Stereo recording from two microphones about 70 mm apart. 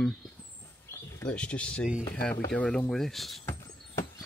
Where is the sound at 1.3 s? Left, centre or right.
Centre.